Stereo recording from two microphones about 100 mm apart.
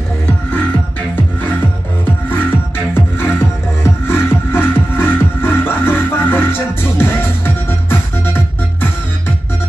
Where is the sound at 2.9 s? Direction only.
25° left (ahead or behind).